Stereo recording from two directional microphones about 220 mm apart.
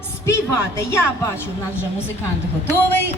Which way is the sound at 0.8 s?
10° left (ahead or behind).